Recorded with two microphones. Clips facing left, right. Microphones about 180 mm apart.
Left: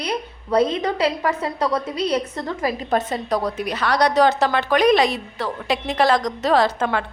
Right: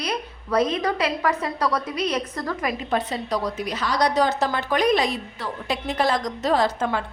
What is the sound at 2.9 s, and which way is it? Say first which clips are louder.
A woman's voice: left 3 dB; 45° left (ahead or behind).